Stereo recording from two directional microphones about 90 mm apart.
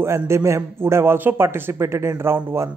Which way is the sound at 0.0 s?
30° right (ahead or behind).